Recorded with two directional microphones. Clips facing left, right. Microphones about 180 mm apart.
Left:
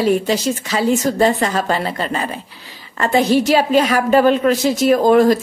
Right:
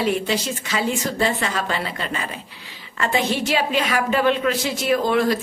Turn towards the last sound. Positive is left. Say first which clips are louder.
# left 7 dB
turn(degrees=45)  # may be behind; listen again after turning